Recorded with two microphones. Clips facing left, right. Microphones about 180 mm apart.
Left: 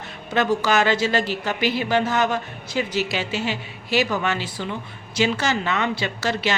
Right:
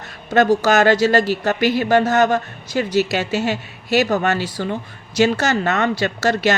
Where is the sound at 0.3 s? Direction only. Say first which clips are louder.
Right 6 dB; 45° right (ahead or behind).